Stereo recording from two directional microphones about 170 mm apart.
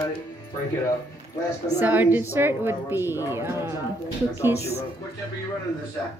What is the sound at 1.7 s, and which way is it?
A woman's voice, 10° right (ahead or behind).